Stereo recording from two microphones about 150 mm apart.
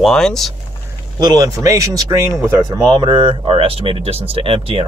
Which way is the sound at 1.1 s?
25° right (ahead or behind).